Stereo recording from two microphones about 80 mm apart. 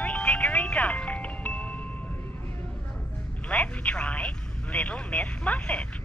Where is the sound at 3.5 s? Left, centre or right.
Centre.